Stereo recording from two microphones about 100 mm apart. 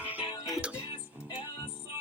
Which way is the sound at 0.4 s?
5° right (ahead or behind).